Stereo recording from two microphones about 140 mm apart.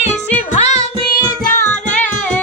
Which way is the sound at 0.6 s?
50° left (ahead or behind).